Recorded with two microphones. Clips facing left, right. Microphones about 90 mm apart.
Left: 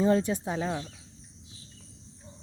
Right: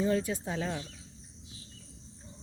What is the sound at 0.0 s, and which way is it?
Speech, 25° left (ahead or behind).